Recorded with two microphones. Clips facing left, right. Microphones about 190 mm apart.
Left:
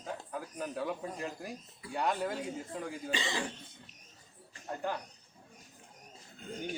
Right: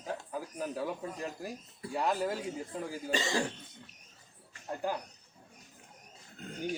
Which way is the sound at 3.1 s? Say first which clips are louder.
Right 5 dB; 45° right (ahead or behind).